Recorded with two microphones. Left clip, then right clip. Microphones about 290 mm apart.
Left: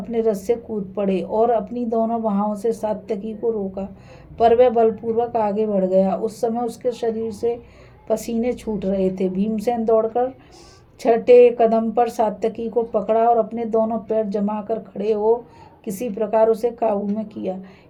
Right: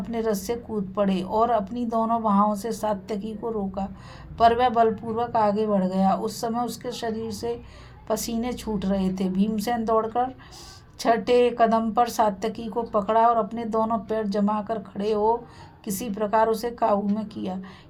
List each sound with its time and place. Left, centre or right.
0.1 s speech: right
4.4 s speech: right